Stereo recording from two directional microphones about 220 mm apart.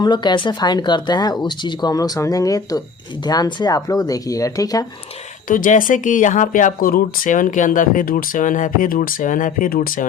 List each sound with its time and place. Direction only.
0.0 s speech: 20° left (ahead or behind)
5.5 s speech: 40° left (ahead or behind)